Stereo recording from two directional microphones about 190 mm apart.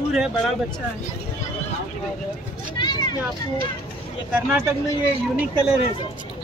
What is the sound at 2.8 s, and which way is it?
Vehicle, 20° left (ahead or behind).